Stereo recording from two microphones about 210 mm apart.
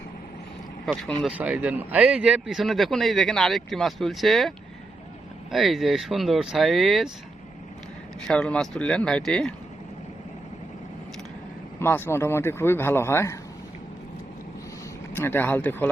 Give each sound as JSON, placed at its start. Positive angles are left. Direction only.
{"t": 1.4, "sound": "speech", "side_deg": -5}
{"t": 8.3, "sound": "speech", "side_deg": 5}
{"t": 11.8, "sound": "a man's voice", "side_deg": 10}
{"t": 15.1, "sound": "a man's voice", "side_deg": 10}